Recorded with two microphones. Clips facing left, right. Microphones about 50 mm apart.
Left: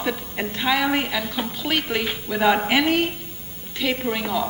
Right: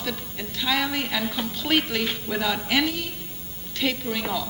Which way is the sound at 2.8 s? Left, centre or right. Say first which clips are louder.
Left 8 dB; left.